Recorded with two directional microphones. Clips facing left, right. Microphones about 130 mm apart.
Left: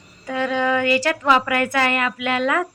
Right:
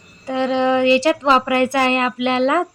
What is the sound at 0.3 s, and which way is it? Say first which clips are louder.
A woman's voice: right 4 dB; 25° right (ahead or behind).